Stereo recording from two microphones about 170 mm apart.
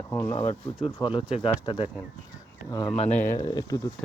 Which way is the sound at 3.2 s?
15° left (ahead or behind).